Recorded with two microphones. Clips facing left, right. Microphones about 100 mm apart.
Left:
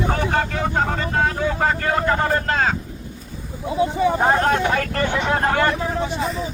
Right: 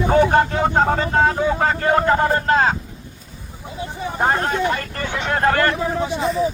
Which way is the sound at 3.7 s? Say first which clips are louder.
Left 10 dB; 85° left.